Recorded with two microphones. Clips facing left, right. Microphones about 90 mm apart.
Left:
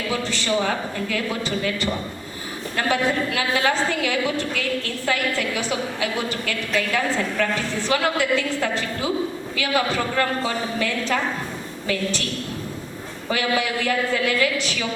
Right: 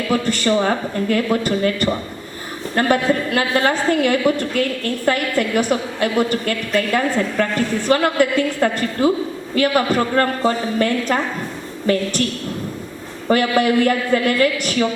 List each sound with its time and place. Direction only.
0.1 s a woman's voice: 50° right (ahead or behind)
13.2 s a woman's voice: 50° right (ahead or behind)